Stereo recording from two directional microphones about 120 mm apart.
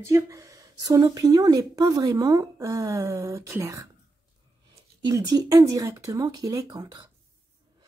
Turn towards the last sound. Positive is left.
turn(degrees=-35)  # may be behind; listen again after turning